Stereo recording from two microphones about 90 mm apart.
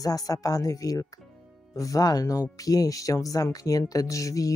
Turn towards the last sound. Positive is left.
turn(degrees=40)  # may be behind; listen again after turning